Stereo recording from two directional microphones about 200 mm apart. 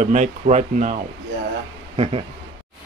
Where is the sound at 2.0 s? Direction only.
30° right (ahead or behind).